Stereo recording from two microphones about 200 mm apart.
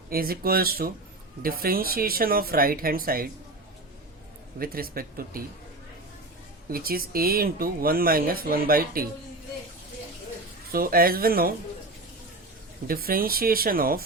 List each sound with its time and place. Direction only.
0.1 s speech: 50° right (ahead or behind)
4.6 s speech: 45° right (ahead or behind)
6.7 s speech: 50° right (ahead or behind)
10.7 s speech: 45° right (ahead or behind)
12.9 s speech: 45° right (ahead or behind)